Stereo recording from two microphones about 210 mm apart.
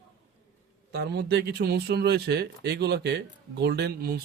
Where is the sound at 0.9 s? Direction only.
50° right (ahead or behind).